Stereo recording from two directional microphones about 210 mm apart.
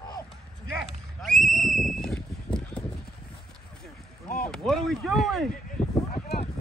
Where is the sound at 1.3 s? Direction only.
40° right (ahead or behind).